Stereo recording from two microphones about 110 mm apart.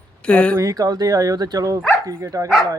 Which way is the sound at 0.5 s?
30° right (ahead or behind).